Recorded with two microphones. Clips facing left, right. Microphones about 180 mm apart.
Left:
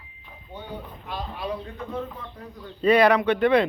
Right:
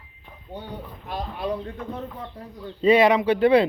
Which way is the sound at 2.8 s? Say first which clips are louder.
Right 1 dB; 25° right (ahead or behind).